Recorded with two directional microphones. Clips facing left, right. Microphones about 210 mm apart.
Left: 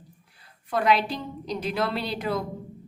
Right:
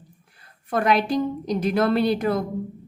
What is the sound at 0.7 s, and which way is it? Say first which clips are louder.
A woman's voice: right 3 dB; 50° right (ahead or behind).